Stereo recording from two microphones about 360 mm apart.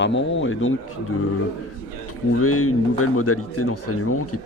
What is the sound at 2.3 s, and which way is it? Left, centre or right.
Speech, left.